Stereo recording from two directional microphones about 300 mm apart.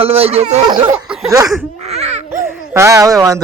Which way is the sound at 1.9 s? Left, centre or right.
Right.